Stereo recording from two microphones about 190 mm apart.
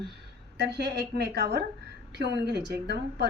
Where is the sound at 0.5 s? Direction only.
60° right (ahead or behind).